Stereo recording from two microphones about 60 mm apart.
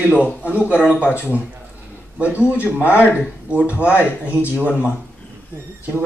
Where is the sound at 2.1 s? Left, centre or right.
Right.